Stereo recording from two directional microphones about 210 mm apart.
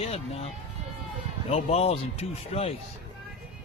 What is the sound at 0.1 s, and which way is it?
Speech, 30° left (ahead or behind).